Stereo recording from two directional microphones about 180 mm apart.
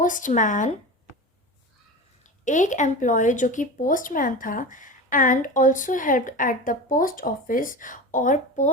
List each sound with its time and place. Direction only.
0.0 s speech: 45° left (ahead or behind)
2.4 s speech: 45° left (ahead or behind)